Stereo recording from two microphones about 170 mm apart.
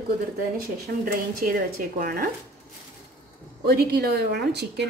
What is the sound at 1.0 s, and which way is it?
Speech, 60° right (ahead or behind).